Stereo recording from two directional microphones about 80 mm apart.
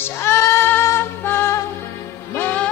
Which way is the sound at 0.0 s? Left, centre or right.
Left.